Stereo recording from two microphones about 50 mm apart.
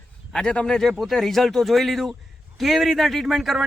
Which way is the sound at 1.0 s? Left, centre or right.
Centre.